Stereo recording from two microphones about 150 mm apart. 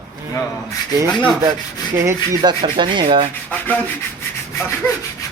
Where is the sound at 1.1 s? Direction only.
5° left (ahead or behind).